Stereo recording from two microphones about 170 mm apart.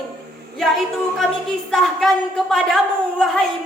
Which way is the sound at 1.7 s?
Centre (ahead or behind).